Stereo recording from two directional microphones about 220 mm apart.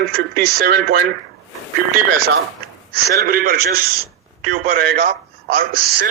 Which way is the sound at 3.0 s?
45° right (ahead or behind).